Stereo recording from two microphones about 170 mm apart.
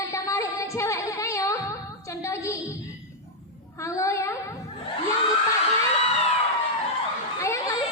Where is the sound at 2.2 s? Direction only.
15° left (ahead or behind).